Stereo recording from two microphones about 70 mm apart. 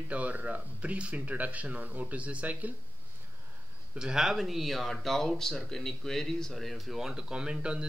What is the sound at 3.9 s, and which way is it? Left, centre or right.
Speech, centre.